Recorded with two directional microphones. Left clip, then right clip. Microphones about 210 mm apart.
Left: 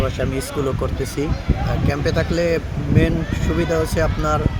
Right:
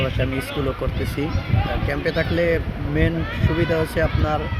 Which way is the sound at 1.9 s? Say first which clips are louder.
Left 2 dB; 25° left (ahead or behind).